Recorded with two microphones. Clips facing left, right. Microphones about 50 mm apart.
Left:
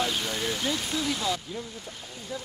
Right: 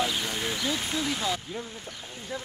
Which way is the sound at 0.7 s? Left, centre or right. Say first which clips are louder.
Even; right.